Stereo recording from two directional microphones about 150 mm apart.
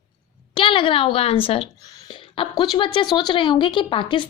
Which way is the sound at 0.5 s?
35° left (ahead or behind).